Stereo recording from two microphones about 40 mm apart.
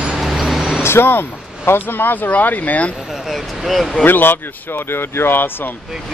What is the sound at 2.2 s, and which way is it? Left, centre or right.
Speech, left.